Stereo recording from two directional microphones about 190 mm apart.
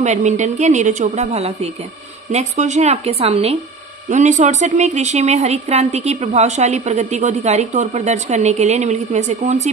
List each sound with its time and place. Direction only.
0.0 s a woman's voice: 40° right (ahead or behind)